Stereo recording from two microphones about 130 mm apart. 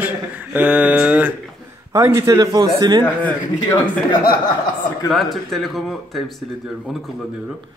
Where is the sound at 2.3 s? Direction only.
35° right (ahead or behind).